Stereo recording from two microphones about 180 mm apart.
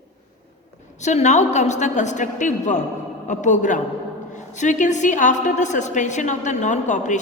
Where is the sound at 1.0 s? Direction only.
40° left (ahead or behind).